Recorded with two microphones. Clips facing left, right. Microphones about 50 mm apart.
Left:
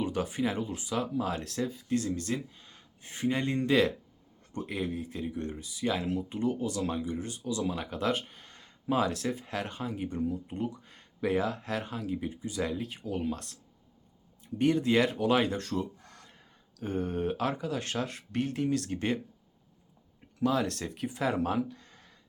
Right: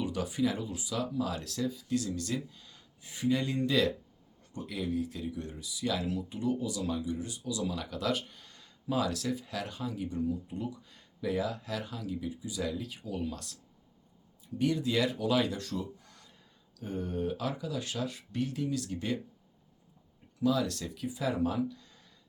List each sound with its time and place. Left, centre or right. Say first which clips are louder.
0.0 s speech: left 1 dB; left
20.4 s speech: left 1 dB; left